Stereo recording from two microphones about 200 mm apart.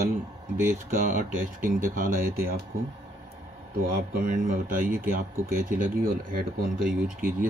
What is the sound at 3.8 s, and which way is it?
Speech, 45° right (ahead or behind).